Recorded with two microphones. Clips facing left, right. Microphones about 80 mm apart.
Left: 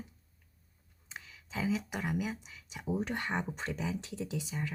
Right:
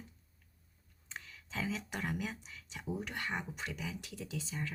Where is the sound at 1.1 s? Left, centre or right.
Centre.